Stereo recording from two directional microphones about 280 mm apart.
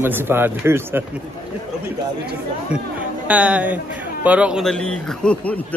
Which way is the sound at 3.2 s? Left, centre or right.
Centre.